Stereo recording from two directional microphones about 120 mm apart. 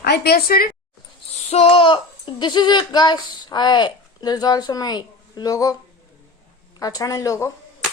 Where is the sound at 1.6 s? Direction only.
50° left (ahead or behind); by 5.7 s 30° left (ahead or behind).